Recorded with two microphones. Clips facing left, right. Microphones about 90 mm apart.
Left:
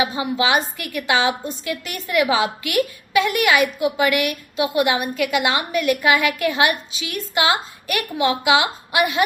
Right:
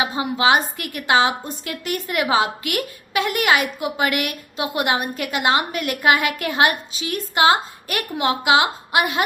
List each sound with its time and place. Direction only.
0.0 s a woman's voice: 40° right (ahead or behind)
2.2 s a woman's voice: 35° right (ahead or behind)
2.6 s a woman's voice: 45° right (ahead or behind)